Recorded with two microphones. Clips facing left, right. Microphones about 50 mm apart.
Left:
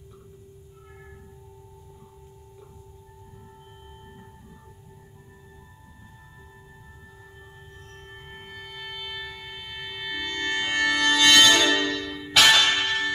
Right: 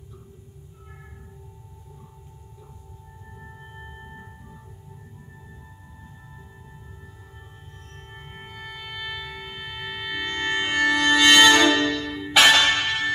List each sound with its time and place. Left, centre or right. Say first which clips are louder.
8.4 s music: right 2 dB; centre